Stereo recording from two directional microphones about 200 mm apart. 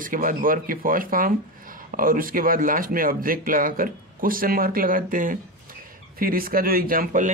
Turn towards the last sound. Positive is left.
turn(degrees=-45)  # may be behind; listen again after turning